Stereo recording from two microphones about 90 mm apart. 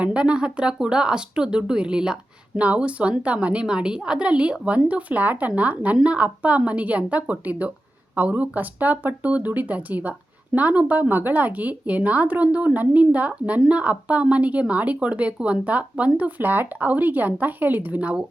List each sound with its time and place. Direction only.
0.0 s speech: 10° right (ahead or behind)